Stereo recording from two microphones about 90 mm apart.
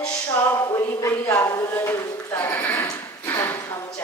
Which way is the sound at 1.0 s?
30° left (ahead or behind).